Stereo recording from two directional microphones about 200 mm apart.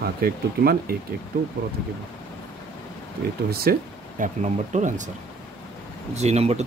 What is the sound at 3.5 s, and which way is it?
Speech, 50° right (ahead or behind).